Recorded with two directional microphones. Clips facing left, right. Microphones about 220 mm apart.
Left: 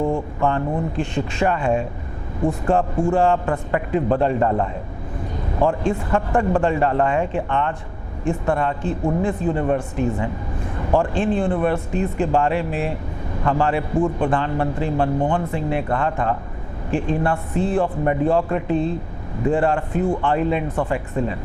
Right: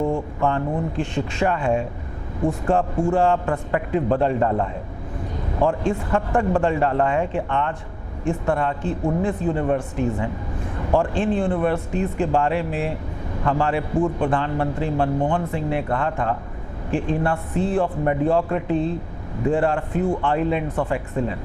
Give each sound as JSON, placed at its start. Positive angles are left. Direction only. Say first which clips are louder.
{"t": 0.3, "sound": "speech", "louder": "left 1 dB", "side_deg": 15}
{"t": 2.4, "sound": "speech", "louder": "left 1 dB", "side_deg": 25}
{"t": 2.7, "sound": "speech", "louder": "left 1 dB", "side_deg": 15}